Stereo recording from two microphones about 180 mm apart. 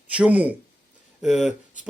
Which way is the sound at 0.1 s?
5° right (ahead or behind).